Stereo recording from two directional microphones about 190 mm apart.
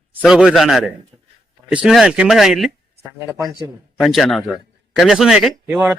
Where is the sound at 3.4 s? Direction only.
20° right (ahead or behind).